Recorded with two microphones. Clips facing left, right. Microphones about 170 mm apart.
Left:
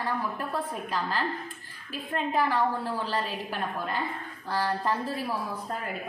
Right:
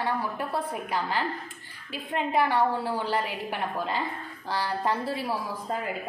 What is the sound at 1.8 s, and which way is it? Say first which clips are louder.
A woman's voice: right 1 dB; 90° right.